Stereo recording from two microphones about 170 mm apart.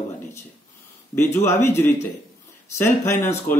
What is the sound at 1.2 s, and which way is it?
Speech, 15° left (ahead or behind).